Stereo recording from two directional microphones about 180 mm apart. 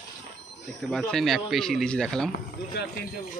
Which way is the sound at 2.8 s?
65° left (ahead or behind).